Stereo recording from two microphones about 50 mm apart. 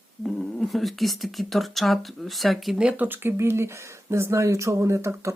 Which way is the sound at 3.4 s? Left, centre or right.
Right.